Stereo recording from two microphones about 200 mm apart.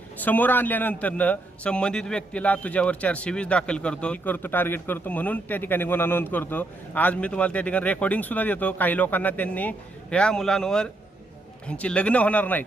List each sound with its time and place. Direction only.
0.2 s a man's voice: 10° left (ahead or behind)